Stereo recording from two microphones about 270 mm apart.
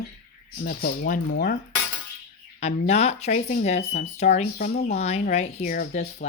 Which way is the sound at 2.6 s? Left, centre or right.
Left.